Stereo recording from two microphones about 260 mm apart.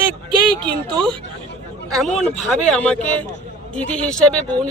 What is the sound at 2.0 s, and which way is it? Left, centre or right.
A man's voice, centre.